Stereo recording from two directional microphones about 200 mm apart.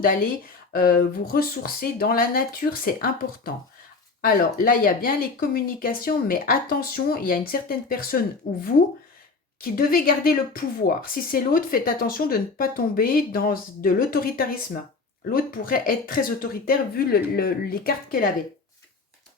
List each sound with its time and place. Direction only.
0.0 s speech: 45° left (ahead or behind)
9.7 s speech: 45° left (ahead or behind)